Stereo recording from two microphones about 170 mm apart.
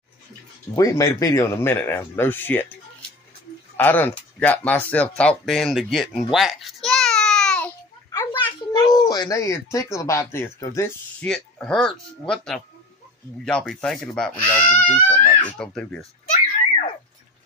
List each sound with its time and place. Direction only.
0.7 s speech: 20° left (ahead or behind)
3.7 s speech: 10° left (ahead or behind)
5.4 s babbling: centre (ahead or behind)
8.1 s speech: 20° left (ahead or behind)
11.2 s speech: 5° left (ahead or behind)